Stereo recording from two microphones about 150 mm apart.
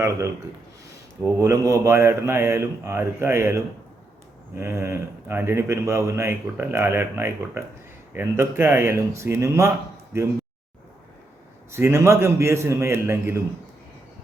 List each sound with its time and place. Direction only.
1.2 s speech: 20° right (ahead or behind)
11.7 s speech: 15° right (ahead or behind)